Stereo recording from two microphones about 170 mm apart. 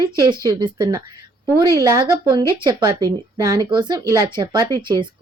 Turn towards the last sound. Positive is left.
turn(degrees=-25)  # may be behind; listen again after turning